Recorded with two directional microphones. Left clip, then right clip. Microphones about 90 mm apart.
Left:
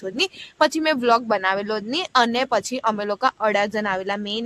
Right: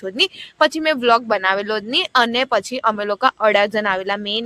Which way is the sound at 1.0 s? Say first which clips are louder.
Right 4 dB; 35° right (ahead or behind).